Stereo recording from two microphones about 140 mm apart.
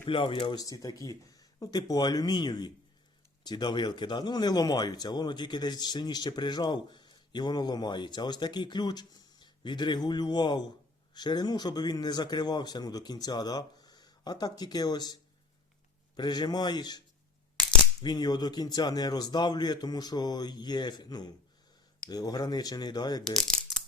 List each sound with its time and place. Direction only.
0.1 s a man's voice: 35° left (ahead or behind)
18.0 s a man's voice: 30° left (ahead or behind)
23.2 s speech: centre (ahead or behind)